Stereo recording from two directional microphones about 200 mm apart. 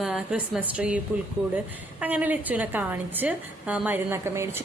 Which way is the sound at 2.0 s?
10° right (ahead or behind).